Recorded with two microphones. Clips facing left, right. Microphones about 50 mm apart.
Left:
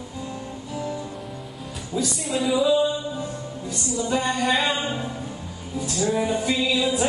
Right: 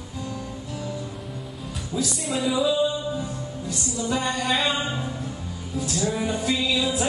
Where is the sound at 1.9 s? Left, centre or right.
Centre.